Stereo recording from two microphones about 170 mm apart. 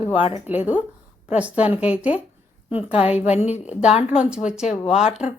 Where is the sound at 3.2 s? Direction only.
40° left (ahead or behind).